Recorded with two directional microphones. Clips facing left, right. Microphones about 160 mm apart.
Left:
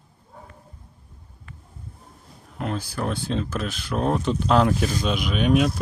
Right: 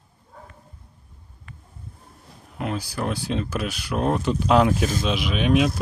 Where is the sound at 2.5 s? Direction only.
5° right (ahead or behind).